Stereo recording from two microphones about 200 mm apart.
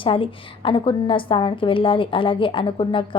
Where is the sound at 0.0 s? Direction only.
25° left (ahead or behind).